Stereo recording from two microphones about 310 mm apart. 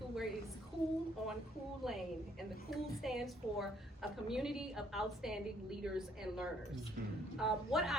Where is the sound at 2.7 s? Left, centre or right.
Centre.